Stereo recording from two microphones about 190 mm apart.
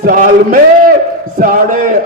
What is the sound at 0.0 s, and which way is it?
Mantra, 45° right (ahead or behind).